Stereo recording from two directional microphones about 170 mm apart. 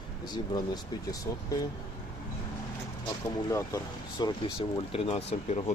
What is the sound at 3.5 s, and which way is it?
Speech, 20° left (ahead or behind).